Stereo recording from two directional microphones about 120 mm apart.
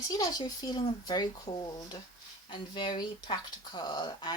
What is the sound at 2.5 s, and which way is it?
Speech, 40° left (ahead or behind).